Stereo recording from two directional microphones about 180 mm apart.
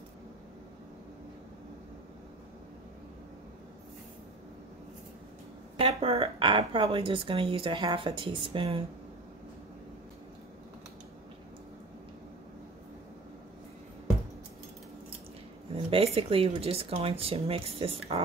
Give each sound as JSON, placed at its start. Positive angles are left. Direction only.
{"t": 5.8, "sound": "speech", "side_deg": -30}
{"t": 15.7, "sound": "speech", "side_deg": -30}